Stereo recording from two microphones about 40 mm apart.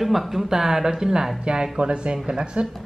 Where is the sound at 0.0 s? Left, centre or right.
Centre; by 2.7 s right.